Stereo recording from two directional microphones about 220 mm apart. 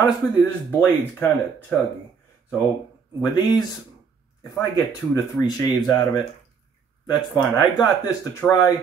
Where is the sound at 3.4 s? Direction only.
15° left (ahead or behind).